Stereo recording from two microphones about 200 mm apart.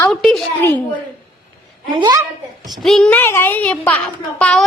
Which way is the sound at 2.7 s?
Centre (ahead or behind).